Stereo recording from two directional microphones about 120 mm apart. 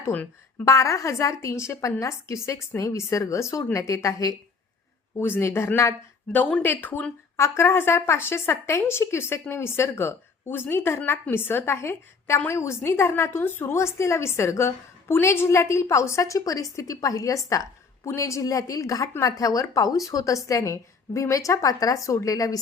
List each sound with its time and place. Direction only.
0.0 s a woman's voice: 20° left (ahead or behind)